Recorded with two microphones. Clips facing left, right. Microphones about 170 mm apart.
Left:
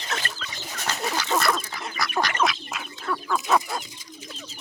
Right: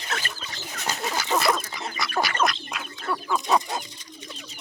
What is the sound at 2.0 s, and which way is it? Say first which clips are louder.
Duck: even; centre (ahead or behind).